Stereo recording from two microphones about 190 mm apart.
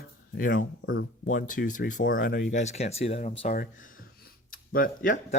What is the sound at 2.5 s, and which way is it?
Speech, 35° left (ahead or behind).